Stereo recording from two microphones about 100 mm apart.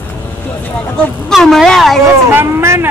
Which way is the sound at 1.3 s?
Centre (ahead or behind).